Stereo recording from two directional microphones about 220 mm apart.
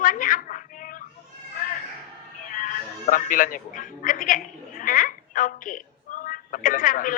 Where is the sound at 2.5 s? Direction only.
35° left (ahead or behind).